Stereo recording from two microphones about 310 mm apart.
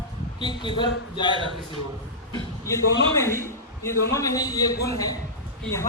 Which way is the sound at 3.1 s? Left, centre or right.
Centre.